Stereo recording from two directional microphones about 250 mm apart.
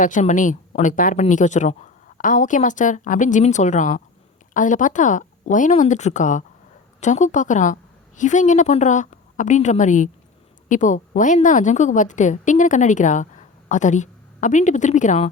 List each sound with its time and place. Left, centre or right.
0.0 s a woman's voice: left